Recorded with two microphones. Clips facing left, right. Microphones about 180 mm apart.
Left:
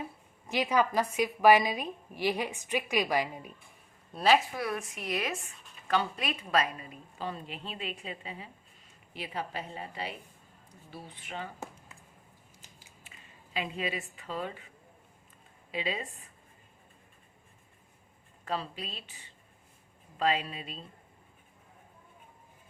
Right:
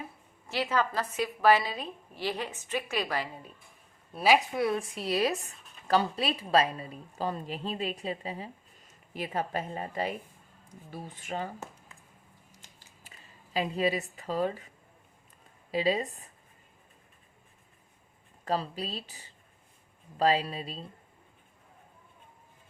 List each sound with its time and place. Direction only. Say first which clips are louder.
0.4 s a woman's voice: left 2 dB; 15° left (ahead or behind)
4.1 s a woman's voice: right 1 dB; 10° right (ahead or behind)
4.5 s a woman's voice: right 6 dB; 25° right (ahead or behind); by 11.5 s 40° right (ahead or behind)
13.1 s speech: right 2 dB; 40° right (ahead or behind)
15.7 s a woman's voice: right 7 dB; 35° right (ahead or behind)
18.4 s a woman's voice: right 4 dB; 40° right (ahead or behind)